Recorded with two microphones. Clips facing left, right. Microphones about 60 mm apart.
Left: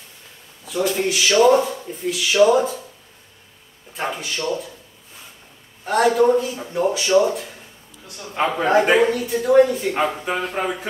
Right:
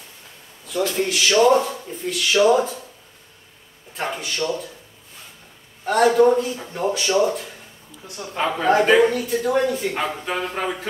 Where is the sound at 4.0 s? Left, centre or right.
Centre.